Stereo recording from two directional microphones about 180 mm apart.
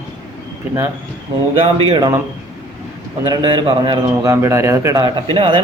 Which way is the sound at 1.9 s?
20° right (ahead or behind).